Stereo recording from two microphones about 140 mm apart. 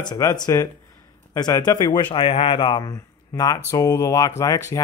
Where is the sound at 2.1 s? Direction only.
40° left (ahead or behind).